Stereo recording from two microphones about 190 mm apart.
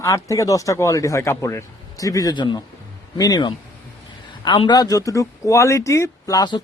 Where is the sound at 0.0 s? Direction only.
15° left (ahead or behind).